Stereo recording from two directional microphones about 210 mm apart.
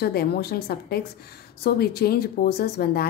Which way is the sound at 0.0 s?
45° left (ahead or behind).